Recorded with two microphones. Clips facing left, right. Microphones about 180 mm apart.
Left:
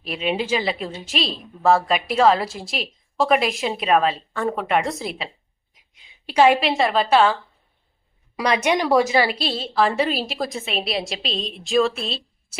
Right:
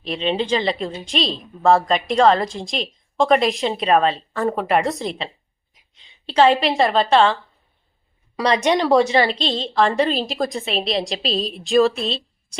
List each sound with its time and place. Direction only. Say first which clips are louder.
0.0 s a woman's voice: right 2 dB; 5° left (ahead or behind)
5.9 s a sound: right 2 dB; 10° left (ahead or behind)
6.6 s a woman's voice: right 2 dB; centre (ahead or behind)
8.4 s speech: right 2 dB; 35° right (ahead or behind)
8.7 s a woman's voice: right 2 dB; 10° left (ahead or behind)